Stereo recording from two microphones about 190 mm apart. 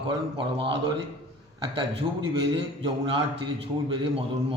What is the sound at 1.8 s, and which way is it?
A man's voice, 25° right (ahead or behind).